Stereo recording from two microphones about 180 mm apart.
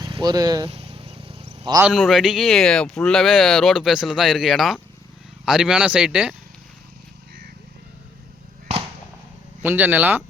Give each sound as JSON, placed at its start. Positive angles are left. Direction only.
{"t": 0.0, "sound": "speech", "side_deg": -25}
{"t": 0.7, "sound": "a sound", "side_deg": -30}
{"t": 1.9, "sound": "speech", "side_deg": 0}
{"t": 9.6, "sound": "speech", "side_deg": -10}